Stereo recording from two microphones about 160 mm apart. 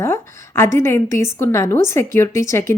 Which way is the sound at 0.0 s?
15° left (ahead or behind).